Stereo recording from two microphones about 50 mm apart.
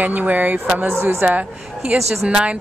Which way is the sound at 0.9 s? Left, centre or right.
Right.